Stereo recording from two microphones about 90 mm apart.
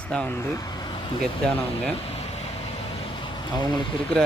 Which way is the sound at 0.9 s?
75° left (ahead or behind).